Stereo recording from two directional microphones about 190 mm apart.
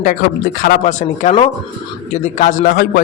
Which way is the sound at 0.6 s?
40° left (ahead or behind).